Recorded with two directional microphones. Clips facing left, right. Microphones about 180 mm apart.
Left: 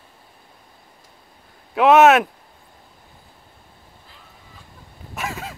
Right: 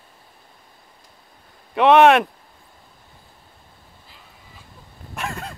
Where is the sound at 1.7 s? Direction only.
5° left (ahead or behind).